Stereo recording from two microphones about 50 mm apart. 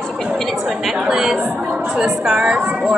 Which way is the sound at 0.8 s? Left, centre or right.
Centre.